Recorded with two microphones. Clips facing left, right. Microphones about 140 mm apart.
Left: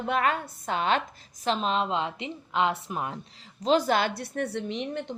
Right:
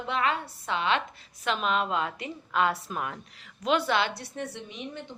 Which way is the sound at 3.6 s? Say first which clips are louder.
Left 3 dB; 40° left (ahead or behind).